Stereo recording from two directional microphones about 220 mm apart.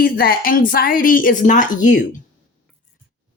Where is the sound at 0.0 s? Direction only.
40° left (ahead or behind).